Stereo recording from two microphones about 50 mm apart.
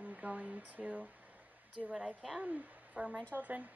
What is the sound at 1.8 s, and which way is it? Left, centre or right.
Speech, centre.